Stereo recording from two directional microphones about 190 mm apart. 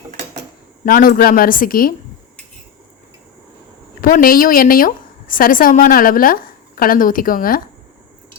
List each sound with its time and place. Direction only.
0.9 s a woman's voice: 50° left (ahead or behind)
4.0 s a woman's voice: 50° left (ahead or behind)